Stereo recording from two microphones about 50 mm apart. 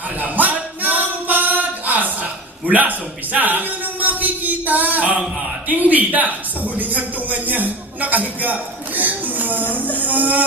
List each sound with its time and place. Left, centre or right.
0.2 s singing: right
2.6 s a man's voice: right
3.3 s a sound: right
5.6 s a man's voice: right
9.0 s a sound: right
10.0 s music: right